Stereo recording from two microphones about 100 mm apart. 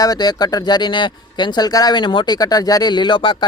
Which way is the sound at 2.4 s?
40° left (ahead or behind).